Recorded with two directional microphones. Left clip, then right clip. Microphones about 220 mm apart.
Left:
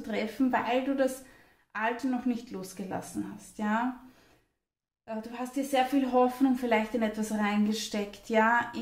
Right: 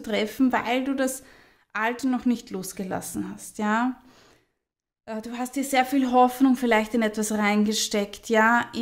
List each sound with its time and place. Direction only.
0.0 s speech: 40° right (ahead or behind)
5.0 s speech: 45° right (ahead or behind)